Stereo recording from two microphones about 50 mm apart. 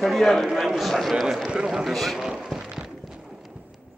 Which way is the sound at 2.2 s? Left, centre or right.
Centre.